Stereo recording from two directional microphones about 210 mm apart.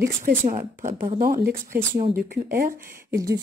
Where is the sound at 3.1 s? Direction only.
15° right (ahead or behind).